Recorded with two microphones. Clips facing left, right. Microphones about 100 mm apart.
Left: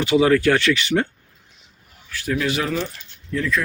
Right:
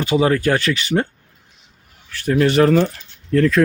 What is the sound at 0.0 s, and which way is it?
Speech, 40° right (ahead or behind).